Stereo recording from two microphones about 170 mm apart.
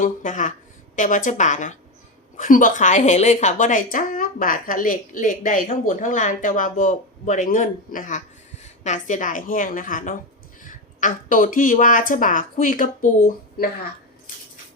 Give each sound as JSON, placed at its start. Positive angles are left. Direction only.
{"t": 0.0, "sound": "a woman's voice", "side_deg": 50}